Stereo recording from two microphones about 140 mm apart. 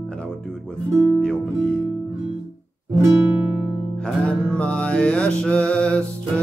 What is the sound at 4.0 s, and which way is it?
Music, 5° left (ahead or behind).